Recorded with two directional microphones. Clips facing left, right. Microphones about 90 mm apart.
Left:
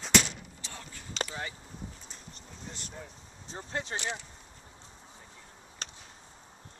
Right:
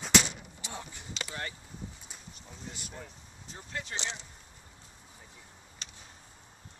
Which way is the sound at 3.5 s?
30° left (ahead or behind).